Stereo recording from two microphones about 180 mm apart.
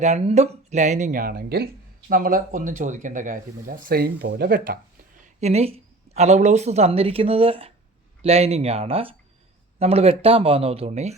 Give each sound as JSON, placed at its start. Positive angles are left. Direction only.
{"t": 0.0, "sound": "speech", "side_deg": -40}